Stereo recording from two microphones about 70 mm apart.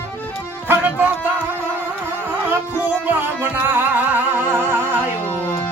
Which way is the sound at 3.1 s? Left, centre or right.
Right.